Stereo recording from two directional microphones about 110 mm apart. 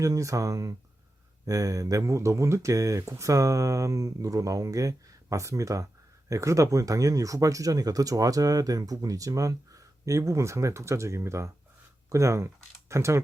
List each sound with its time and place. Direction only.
0.0 s speech: 30° right (ahead or behind)